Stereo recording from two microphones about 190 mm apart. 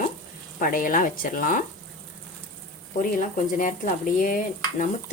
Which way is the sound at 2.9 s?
45° left (ahead or behind).